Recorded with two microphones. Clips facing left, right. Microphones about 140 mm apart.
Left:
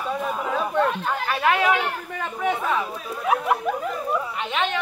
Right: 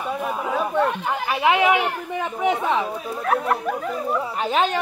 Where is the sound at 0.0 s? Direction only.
10° right (ahead or behind); by 3.2 s 25° right (ahead or behind).